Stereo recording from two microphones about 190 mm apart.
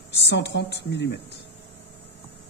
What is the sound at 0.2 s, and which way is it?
A woman's voice, 65° left (ahead or behind).